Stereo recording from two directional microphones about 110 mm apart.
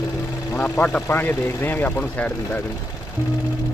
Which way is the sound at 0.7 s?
10° left (ahead or behind).